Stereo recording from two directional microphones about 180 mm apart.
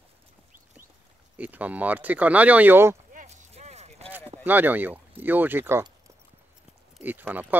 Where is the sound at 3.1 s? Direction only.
45° right (ahead or behind).